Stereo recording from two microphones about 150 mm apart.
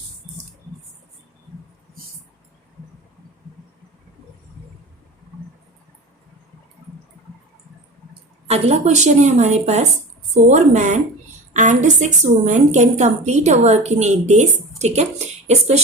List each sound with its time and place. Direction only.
8.4 s a woman's voice: 45° right (ahead or behind)